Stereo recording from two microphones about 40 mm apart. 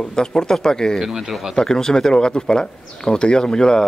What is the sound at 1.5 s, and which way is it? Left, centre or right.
Speech, centre.